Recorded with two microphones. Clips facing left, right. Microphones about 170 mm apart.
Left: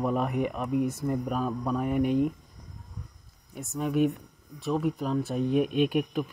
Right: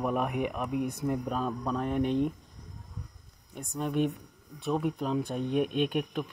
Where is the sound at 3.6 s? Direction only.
5° left (ahead or behind).